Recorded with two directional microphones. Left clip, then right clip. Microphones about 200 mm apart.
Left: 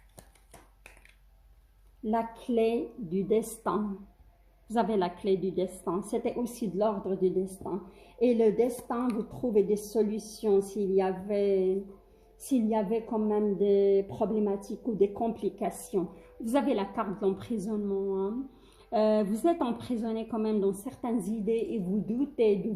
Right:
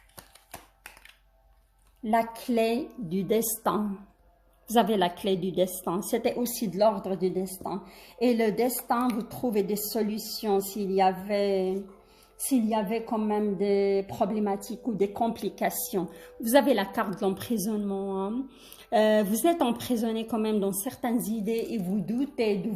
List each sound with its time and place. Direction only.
2.0 s a woman's voice: 40° right (ahead or behind)
4.8 s a woman's voice: 45° right (ahead or behind)